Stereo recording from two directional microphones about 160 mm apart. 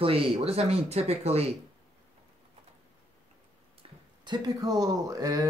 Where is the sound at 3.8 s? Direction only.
25° right (ahead or behind).